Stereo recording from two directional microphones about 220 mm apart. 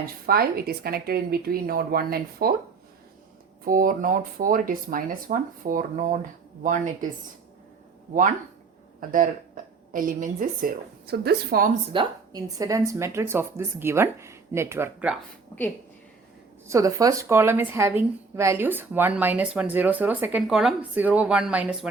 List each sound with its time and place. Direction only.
0.0 s a woman's voice: 45° right (ahead or behind)
3.6 s speech: 40° right (ahead or behind)
9.0 s speech: 35° right (ahead or behind)
11.9 s a woman's voice: 20° right (ahead or behind)
15.1 s a woman's voice: 10° left (ahead or behind)
16.6 s a woman's voice: 15° right (ahead or behind)